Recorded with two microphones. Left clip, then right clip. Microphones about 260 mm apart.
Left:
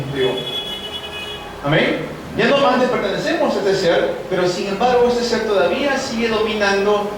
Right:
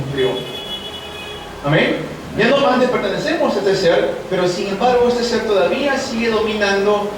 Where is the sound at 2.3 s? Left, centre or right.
Centre.